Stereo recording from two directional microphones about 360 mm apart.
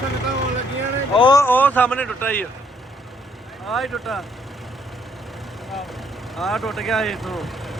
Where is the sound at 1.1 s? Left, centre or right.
Centre.